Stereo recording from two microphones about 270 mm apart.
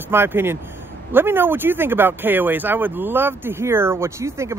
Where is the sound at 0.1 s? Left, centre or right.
Centre.